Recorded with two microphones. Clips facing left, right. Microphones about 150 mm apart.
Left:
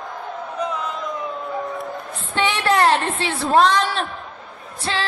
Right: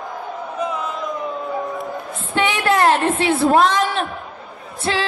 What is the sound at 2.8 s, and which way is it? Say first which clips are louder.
Speech: right 3 dB; 45° right (ahead or behind).